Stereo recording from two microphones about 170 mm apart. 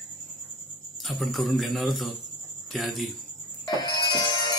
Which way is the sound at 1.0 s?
Centre (ahead or behind).